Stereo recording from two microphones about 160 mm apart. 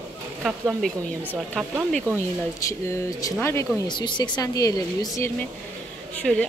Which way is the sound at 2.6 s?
20° left (ahead or behind).